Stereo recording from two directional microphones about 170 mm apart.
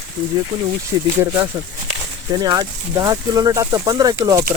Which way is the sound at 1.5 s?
15° right (ahead or behind).